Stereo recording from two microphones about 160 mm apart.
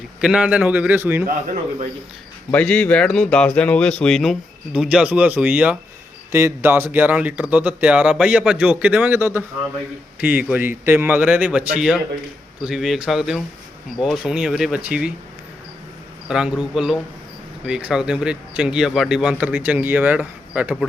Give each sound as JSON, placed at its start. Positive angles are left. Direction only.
{"t": 0.2, "sound": "speech", "side_deg": -5}
{"t": 2.5, "sound": "speech", "side_deg": 10}
{"t": 16.3, "sound": "speech", "side_deg": -5}